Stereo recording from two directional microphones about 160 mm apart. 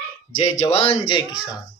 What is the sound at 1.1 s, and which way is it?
Speech, 25° left (ahead or behind).